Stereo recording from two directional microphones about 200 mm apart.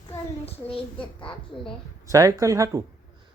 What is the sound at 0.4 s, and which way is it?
A child's voice, 25° left (ahead or behind).